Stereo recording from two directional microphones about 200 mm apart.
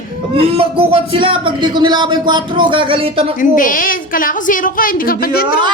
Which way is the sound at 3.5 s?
45° left (ahead or behind).